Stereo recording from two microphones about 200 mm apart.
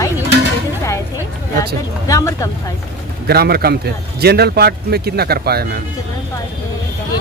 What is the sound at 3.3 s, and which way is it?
Speech, 50° right (ahead or behind).